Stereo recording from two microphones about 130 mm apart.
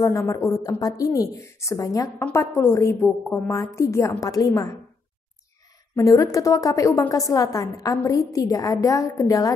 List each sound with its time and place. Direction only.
0.0 s a woman's voice: 20° left (ahead or behind)
5.9 s a woman's voice: 25° left (ahead or behind)